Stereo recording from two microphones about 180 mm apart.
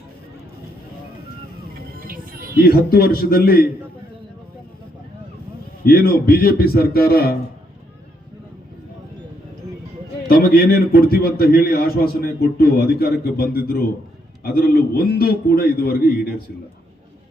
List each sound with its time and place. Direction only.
2.0 s music: 50° right (ahead or behind)
2.6 s a man's voice: 60° left (ahead or behind)
5.8 s a man's voice: 55° left (ahead or behind)
10.2 s a man's voice: 55° left (ahead or behind)